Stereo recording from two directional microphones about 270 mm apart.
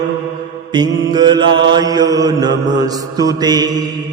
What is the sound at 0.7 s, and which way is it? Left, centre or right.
Mantra, centre.